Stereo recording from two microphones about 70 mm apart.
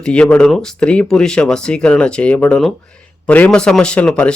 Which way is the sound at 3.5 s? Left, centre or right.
Centre.